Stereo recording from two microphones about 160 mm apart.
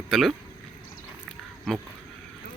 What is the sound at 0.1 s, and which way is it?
Speech, centre (ahead or behind).